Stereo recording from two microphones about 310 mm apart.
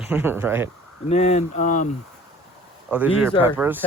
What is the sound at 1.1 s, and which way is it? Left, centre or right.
Speech, left.